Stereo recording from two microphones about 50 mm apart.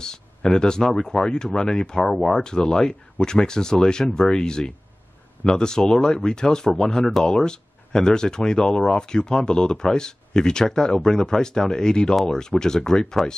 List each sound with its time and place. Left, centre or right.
0.0 s speech: centre
2.1 s speech: centre
2.4 s speech: centre